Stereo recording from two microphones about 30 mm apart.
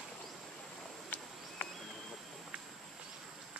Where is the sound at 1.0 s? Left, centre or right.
Left.